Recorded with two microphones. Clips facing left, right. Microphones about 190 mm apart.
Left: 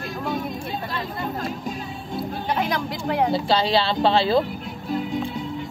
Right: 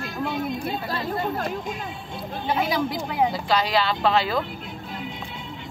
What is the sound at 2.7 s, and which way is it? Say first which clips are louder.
Speech: even; 5° right (ahead or behind).